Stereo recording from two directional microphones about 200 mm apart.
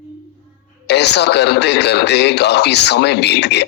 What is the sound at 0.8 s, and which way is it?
A man's voice, 60° left (ahead or behind).